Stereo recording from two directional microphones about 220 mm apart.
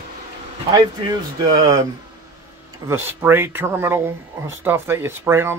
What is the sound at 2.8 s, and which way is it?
A man's voice, 10° right (ahead or behind).